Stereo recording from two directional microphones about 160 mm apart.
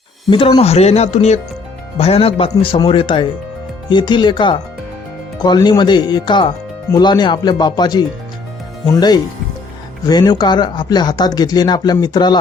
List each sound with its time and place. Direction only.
0.3 s speech: 30° left (ahead or behind)